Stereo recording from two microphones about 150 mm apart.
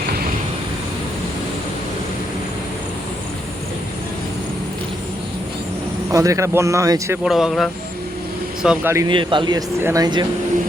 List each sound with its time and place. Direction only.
6.1 s speech: 20° right (ahead or behind)
7.3 s speech: centre (ahead or behind)
9.0 s a man's voice: 30° right (ahead or behind)